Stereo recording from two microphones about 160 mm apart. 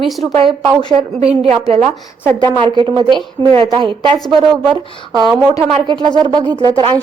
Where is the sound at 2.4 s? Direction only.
30° right (ahead or behind).